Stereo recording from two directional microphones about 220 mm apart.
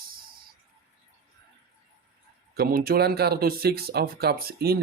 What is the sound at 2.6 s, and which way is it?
Speech, 45° right (ahead or behind).